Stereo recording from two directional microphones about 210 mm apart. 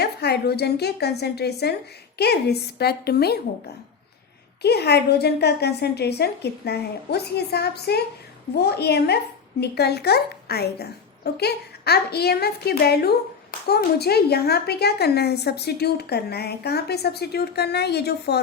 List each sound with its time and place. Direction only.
0.0 s a woman's voice: 50° left (ahead or behind)
4.6 s a woman's voice: 50° left (ahead or behind)